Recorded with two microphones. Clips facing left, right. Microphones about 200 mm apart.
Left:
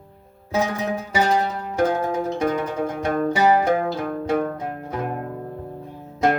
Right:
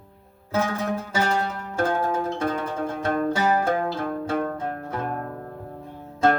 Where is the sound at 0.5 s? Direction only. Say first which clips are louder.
Left 2 dB; 10° left (ahead or behind).